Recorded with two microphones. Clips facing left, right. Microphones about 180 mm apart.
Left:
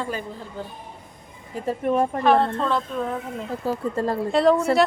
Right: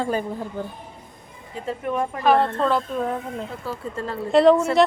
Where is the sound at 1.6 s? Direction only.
35° left (ahead or behind).